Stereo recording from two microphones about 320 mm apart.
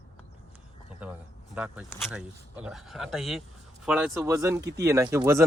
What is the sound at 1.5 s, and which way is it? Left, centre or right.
Speech, centre.